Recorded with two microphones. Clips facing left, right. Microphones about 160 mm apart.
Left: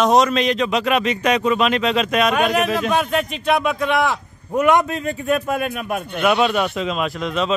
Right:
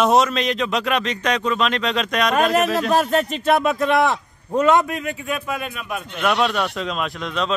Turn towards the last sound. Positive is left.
turn(degrees=5)  # may be behind; listen again after turning